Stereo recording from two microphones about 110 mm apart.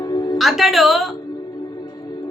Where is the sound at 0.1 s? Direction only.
35° left (ahead or behind).